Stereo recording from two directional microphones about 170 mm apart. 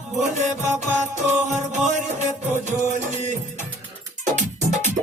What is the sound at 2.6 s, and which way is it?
Music, 45° right (ahead or behind).